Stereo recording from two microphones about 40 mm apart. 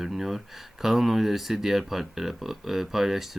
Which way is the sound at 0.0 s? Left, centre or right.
Centre.